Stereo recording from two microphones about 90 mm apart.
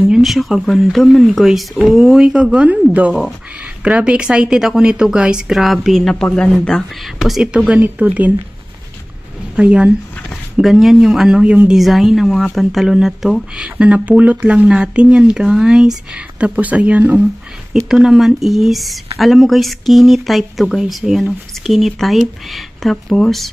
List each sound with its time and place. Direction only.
0.1 s speech: centre (ahead or behind)
7.5 s speech: 15° right (ahead or behind)
9.6 s speech: 15° right (ahead or behind)
10.3 s speech: 5° right (ahead or behind)
17.7 s speech: 5° right (ahead or behind)